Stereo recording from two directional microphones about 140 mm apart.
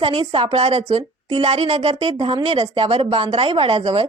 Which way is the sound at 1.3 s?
45° right (ahead or behind).